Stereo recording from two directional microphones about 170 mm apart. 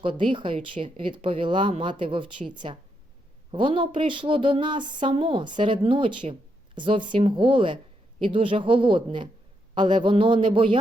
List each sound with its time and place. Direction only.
0.0 s speech: 30° right (ahead or behind)